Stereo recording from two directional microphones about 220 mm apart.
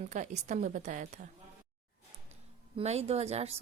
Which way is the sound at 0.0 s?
35° right (ahead or behind).